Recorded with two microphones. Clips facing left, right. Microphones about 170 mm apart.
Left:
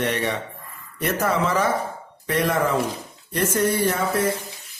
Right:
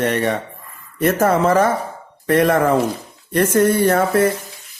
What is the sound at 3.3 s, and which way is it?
Speech, 60° right (ahead or behind).